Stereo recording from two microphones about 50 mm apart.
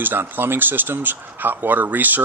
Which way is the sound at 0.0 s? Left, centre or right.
Right.